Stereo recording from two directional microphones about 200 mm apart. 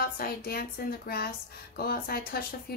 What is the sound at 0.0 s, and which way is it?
A woman's voice, 50° left (ahead or behind).